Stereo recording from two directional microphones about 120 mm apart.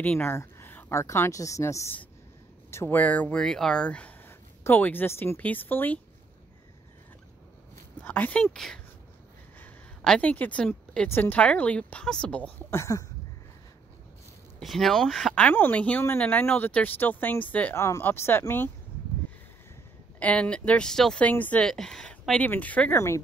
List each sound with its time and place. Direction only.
0.0 s a woman's voice: 15° left (ahead or behind)
8.0 s speech: 15° left (ahead or behind)
9.6 s a sound: 10° left (ahead or behind)
11.1 s speech: 15° left (ahead or behind)
14.6 s speech: centre (ahead or behind); by 18.7 s 20° left (ahead or behind)
20.2 s speech: 10° left (ahead or behind)
22.9 s speech: 25° left (ahead or behind)